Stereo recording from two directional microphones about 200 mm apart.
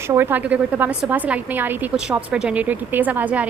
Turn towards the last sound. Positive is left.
turn(degrees=-5)  # may be behind; listen again after turning